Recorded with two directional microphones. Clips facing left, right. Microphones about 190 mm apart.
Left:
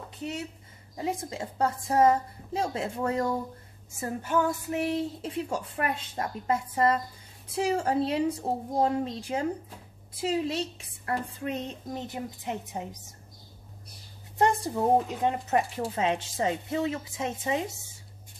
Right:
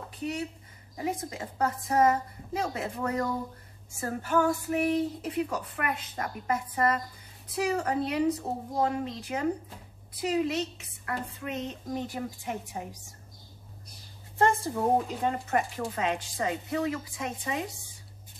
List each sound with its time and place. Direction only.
0.9 s a woman's voice: 30° left (ahead or behind)
12.1 s a woman's voice: 20° left (ahead or behind)
14.4 s a woman's voice: 20° left (ahead or behind)